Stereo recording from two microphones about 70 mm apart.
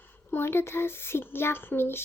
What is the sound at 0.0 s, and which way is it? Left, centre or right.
A woman's voice, left.